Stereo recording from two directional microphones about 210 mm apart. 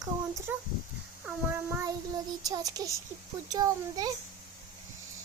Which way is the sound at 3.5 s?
20° right (ahead or behind).